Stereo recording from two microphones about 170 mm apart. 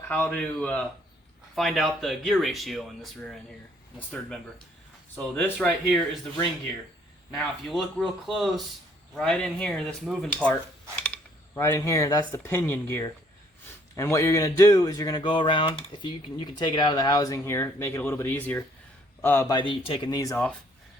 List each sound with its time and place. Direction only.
0.1 s speech: 10° left (ahead or behind)
5.1 s speech: 10° left (ahead or behind)
7.3 s speech: centre (ahead or behind)
11.0 s a sound: 15° left (ahead or behind)
12.3 s speech: 15° left (ahead or behind)